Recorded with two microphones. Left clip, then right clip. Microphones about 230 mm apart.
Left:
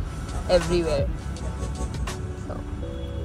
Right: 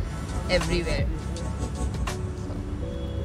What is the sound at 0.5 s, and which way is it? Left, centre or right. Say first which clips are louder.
Speech: left 5 dB; centre.